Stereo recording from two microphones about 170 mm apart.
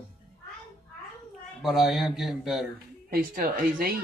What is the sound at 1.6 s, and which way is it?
Speech, centre (ahead or behind).